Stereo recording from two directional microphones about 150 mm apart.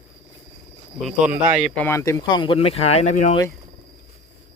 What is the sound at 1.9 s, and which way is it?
Speech, 20° left (ahead or behind).